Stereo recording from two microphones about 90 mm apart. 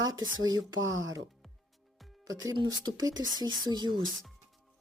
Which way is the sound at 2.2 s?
40° right (ahead or behind).